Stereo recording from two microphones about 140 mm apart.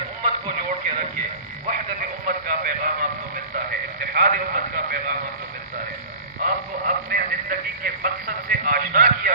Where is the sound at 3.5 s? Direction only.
90° right.